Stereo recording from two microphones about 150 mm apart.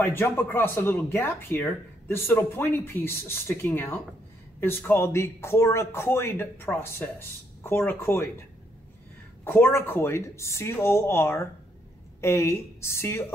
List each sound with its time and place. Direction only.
0.0 s speech: 15° left (ahead or behind)
9.4 s speech: 15° left (ahead or behind)